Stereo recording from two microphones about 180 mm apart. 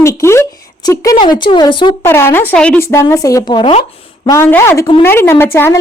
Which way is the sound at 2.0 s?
15° left (ahead or behind).